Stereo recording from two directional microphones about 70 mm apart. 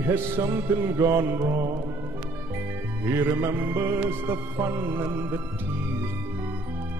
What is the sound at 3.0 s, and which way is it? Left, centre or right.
Music, right.